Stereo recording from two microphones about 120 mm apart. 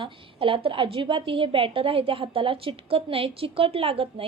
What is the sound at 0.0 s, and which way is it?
A woman's voice, 45° right (ahead or behind).